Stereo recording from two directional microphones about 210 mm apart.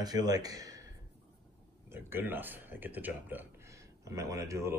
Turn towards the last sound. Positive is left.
turn(degrees=-15)  # may be behind; listen again after turning